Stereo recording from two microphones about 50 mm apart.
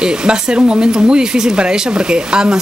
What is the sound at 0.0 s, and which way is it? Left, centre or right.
Speech, centre.